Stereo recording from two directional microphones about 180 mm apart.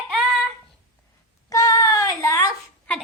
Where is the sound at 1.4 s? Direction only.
20° left (ahead or behind).